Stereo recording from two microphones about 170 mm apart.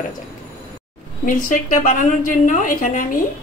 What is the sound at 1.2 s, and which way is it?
A woman's voice, 50° left (ahead or behind).